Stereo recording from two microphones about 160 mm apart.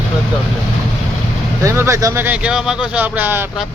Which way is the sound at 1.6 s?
15° right (ahead or behind).